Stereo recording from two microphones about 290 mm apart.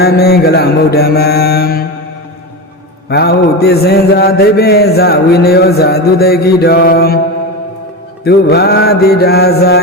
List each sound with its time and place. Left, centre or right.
0.0 s mantra: left
3.1 s mantra: left
8.2 s mantra: left